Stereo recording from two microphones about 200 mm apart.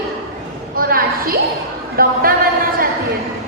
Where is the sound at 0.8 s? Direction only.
45° right (ahead or behind).